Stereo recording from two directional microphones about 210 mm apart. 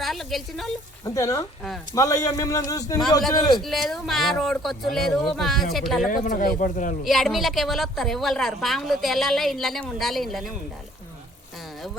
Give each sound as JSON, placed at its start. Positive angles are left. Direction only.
{"t": 0.0, "sound": "a sound", "side_deg": 0}
{"t": 1.0, "sound": "a man's voice", "side_deg": 15}
{"t": 3.6, "sound": "a woman's voice", "side_deg": 0}
{"t": 6.1, "sound": "speech", "side_deg": 40}
{"t": 7.0, "sound": "a woman's voice", "side_deg": 0}